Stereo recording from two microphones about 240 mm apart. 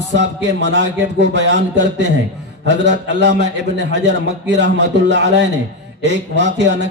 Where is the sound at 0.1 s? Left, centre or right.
Right.